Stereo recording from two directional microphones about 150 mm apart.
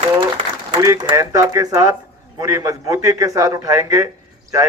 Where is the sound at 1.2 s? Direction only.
20° right (ahead or behind).